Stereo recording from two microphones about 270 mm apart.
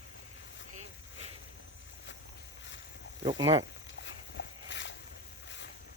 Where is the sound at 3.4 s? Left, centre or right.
Right.